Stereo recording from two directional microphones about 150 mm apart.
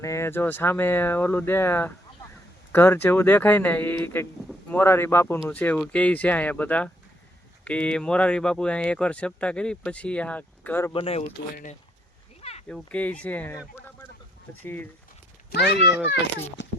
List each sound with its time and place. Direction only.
0.0 s speech: 20° left (ahead or behind)
10.9 s speech: 40° left (ahead or behind)
11.5 s speech: 55° left (ahead or behind)
12.4 s a sound: 45° left (ahead or behind)
12.6 s speech: 10° left (ahead or behind)
14.6 s speech: 15° left (ahead or behind)
15.4 s speech: 90° left